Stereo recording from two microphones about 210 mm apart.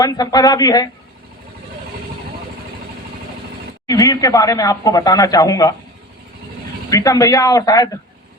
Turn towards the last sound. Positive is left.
turn(degrees=15)  # may be behind; listen again after turning